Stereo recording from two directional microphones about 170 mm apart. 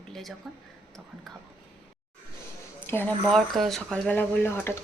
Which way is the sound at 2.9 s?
15° left (ahead or behind).